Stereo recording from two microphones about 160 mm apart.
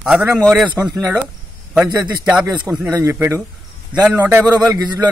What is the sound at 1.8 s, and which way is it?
A man's voice, 25° right (ahead or behind).